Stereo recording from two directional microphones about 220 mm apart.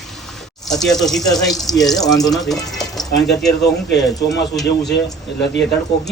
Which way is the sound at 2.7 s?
Centre (ahead or behind).